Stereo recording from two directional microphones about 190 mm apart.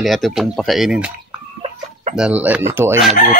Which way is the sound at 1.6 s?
30° right (ahead or behind).